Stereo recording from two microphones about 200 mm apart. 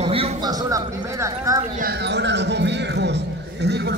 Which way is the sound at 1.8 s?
55° right (ahead or behind).